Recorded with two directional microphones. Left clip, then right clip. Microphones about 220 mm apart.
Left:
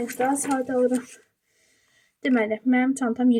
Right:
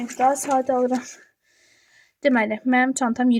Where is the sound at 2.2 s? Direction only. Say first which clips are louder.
Right 3 dB; 45° right (ahead or behind).